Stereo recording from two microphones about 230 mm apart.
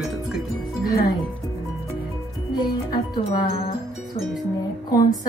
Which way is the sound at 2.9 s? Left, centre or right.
Centre.